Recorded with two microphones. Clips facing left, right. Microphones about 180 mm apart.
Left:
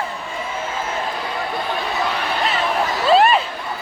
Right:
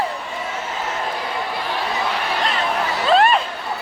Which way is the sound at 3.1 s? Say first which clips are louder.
Left 1 dB; 5° left (ahead or behind).